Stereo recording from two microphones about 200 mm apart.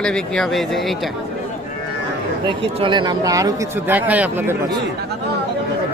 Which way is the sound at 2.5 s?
25° right (ahead or behind).